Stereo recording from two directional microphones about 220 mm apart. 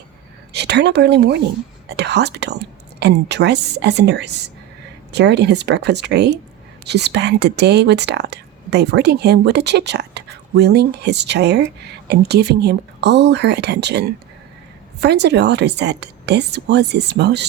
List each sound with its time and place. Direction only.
0.5 s speech: 50° right (ahead or behind)